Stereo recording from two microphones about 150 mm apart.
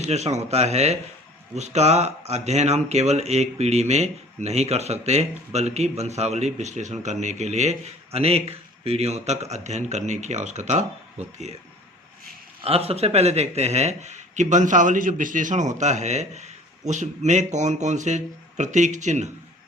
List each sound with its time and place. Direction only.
0.0 s speech: 45° right (ahead or behind)
12.6 s speech: 40° right (ahead or behind)